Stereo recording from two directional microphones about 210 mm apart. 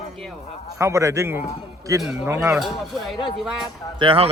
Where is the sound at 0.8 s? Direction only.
15° right (ahead or behind).